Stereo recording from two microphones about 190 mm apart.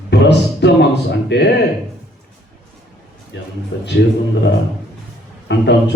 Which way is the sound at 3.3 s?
65° left (ahead or behind).